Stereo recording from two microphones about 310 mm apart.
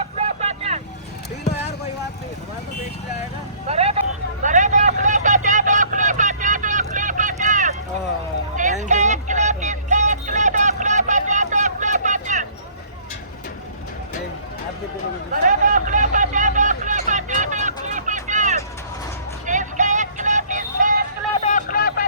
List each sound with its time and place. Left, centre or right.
0.3 s vehicle: right
3.7 s vehicle: centre
15.3 s vehicle: right
21.4 s a sound: left